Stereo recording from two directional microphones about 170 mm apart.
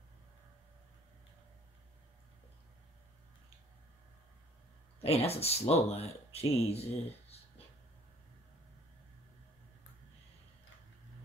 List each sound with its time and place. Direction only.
5.0 s speech: 35° left (ahead or behind)